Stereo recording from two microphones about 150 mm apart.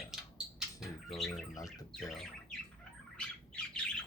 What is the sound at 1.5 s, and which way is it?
Bird, 25° left (ahead or behind).